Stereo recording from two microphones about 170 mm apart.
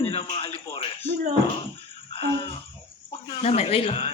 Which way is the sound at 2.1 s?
30° left (ahead or behind).